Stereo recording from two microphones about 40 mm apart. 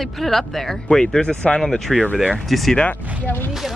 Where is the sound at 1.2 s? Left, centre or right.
Left.